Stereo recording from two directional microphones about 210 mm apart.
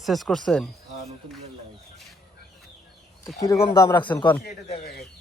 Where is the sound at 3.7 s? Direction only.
15° left (ahead or behind).